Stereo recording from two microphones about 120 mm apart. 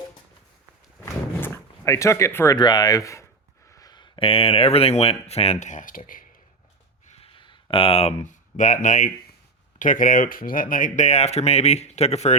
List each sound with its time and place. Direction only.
1.0 s dog: 20° left (ahead or behind)
2.6 s speech: 35° left (ahead or behind); by 6.1 s 90° left
7.2 s a sound: 45° left (ahead or behind)
8.2 s speech: 90° left; by 12.4 s 65° left (ahead or behind)